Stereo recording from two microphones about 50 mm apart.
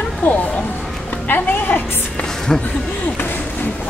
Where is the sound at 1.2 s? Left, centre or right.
Left.